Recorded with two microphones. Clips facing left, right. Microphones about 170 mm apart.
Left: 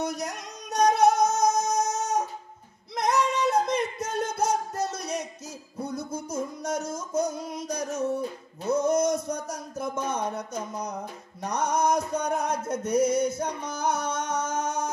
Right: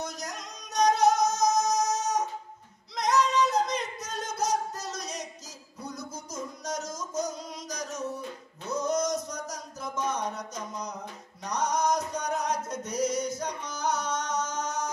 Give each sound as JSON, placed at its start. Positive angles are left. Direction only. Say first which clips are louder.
{"t": 0.0, "sound": "music", "louder": "left 6 dB", "side_deg": 60}
{"t": 3.0, "sound": "singing", "louder": "even", "side_deg": 55}
{"t": 4.4, "sound": "music", "louder": "left 1 dB", "side_deg": 55}
{"t": 8.1, "sound": "music", "louder": "left 8 dB", "side_deg": 30}
{"t": 8.7, "sound": "music", "louder": "left 4 dB", "side_deg": 55}
{"t": 11.4, "sound": "music", "louder": "left 2 dB", "side_deg": 55}